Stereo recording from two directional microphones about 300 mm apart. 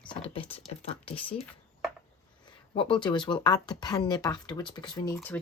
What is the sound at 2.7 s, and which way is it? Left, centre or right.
Speech, centre.